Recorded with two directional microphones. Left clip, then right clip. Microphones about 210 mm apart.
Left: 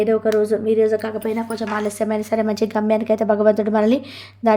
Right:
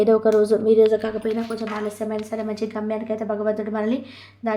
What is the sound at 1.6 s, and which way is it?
A woman's voice, 45° left (ahead or behind).